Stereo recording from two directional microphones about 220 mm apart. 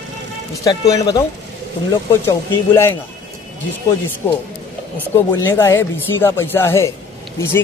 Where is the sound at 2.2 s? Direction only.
10° left (ahead or behind).